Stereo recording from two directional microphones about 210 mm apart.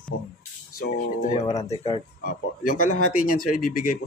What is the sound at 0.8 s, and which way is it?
Speech, 35° left (ahead or behind).